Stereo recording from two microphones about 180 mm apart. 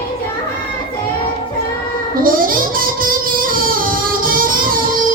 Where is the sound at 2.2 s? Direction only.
50° right (ahead or behind).